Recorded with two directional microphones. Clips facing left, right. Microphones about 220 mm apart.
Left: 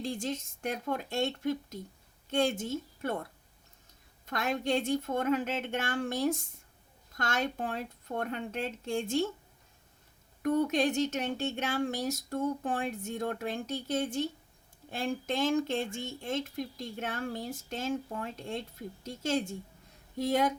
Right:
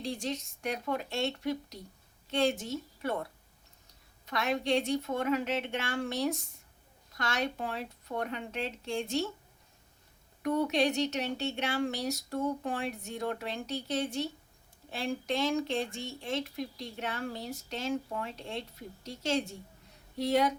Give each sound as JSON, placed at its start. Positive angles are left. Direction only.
{"t": 0.1, "sound": "a sound", "side_deg": 50}
{"t": 4.3, "sound": "speech", "side_deg": 50}
{"t": 10.4, "sound": "speech", "side_deg": 50}